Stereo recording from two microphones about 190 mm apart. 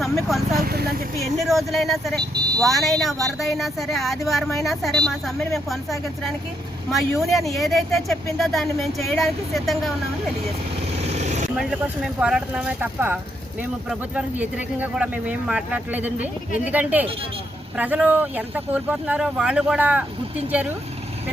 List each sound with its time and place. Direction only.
0.6 s speech: 55° right (ahead or behind)
1.2 s speech: centre (ahead or behind)
10.9 s vehicle: 35° right (ahead or behind)
11.5 s speech: centre (ahead or behind)